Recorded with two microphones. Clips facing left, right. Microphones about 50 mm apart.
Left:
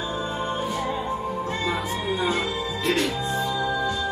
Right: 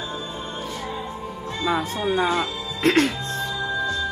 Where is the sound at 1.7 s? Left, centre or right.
Right.